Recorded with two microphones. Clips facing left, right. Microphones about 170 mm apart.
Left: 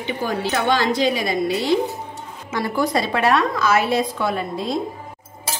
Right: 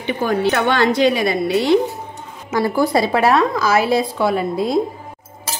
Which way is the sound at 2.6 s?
30° right (ahead or behind).